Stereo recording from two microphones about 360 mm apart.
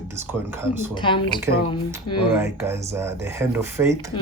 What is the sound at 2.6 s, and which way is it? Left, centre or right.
Speech, centre.